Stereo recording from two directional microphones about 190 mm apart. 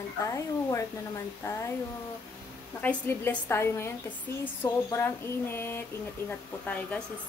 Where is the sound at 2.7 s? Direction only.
10° left (ahead or behind).